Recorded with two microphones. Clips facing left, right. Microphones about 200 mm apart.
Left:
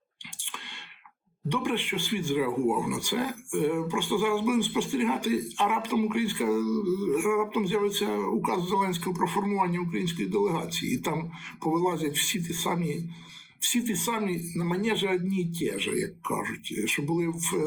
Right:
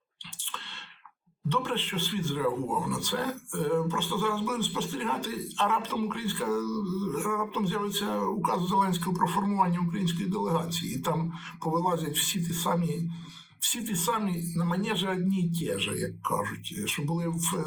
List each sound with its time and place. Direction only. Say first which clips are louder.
1.5 s speech: left 2 dB; 15° left (ahead or behind)